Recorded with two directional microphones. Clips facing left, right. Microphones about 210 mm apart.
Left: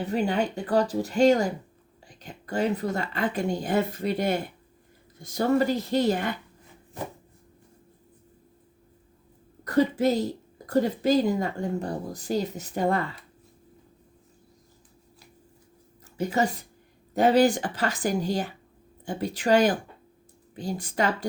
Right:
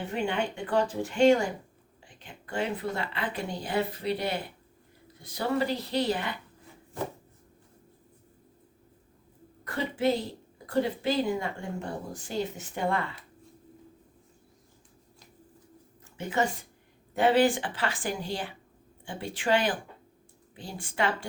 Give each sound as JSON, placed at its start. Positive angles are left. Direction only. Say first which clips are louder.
{"t": 0.1, "sound": "a woman's voice", "louder": "left 4 dB", "side_deg": 40}
{"t": 9.6, "sound": "speech", "louder": "left 5 dB", "side_deg": 40}
{"t": 16.1, "sound": "speech", "louder": "left 3 dB", "side_deg": 40}